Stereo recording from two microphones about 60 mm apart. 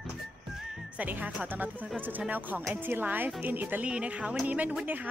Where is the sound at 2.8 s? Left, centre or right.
Right.